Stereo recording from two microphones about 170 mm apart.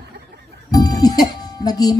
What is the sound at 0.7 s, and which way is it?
Music, 20° left (ahead or behind).